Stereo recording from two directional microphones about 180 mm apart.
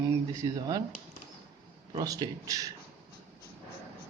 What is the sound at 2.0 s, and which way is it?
Speech, 20° right (ahead or behind).